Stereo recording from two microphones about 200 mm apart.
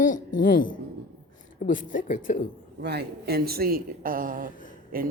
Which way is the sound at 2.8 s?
55° right (ahead or behind).